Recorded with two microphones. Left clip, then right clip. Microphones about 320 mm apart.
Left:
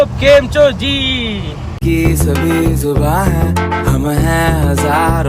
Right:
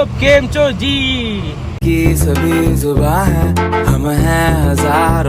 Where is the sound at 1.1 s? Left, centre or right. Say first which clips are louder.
Left 1 dB; right.